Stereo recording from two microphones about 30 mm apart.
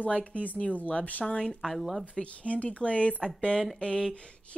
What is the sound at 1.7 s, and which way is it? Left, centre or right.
Speech, centre.